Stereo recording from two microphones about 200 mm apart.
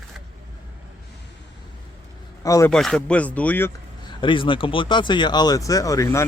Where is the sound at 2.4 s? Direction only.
15° left (ahead or behind).